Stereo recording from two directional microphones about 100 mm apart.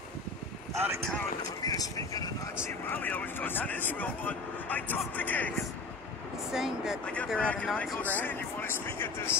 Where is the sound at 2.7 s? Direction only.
20° left (ahead or behind).